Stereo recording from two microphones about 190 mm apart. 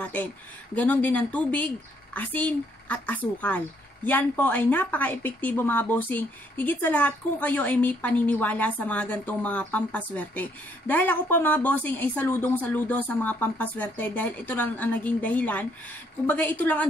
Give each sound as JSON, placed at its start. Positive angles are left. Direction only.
{"t": 0.0, "sound": "speech", "side_deg": 10}